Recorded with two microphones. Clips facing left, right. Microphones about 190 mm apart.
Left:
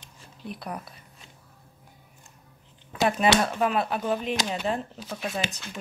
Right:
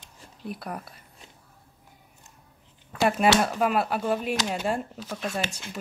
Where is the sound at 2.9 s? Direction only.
5° right (ahead or behind).